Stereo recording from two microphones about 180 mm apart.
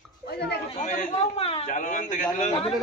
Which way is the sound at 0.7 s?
35° left (ahead or behind).